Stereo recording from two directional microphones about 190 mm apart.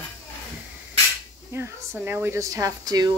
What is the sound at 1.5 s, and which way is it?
Speech, 10° right (ahead or behind).